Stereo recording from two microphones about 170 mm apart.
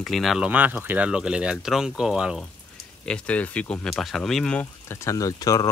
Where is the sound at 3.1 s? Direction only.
10° left (ahead or behind).